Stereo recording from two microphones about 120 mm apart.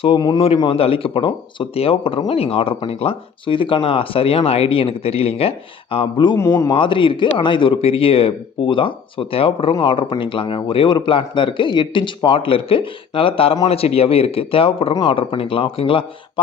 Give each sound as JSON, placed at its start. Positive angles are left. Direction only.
{"t": 0.0, "sound": "a man's voice", "side_deg": 40}
{"t": 0.3, "sound": "speech", "side_deg": 55}
{"t": 6.3, "sound": "a man's voice", "side_deg": 20}
{"t": 6.7, "sound": "speech", "side_deg": 45}